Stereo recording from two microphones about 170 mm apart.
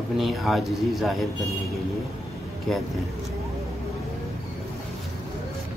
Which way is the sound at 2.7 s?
5° left (ahead or behind).